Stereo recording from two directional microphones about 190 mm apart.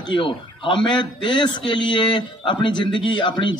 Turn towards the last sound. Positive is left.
turn(degrees=25)  # may be behind; listen again after turning